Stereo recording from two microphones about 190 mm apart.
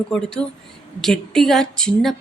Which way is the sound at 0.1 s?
5° left (ahead or behind).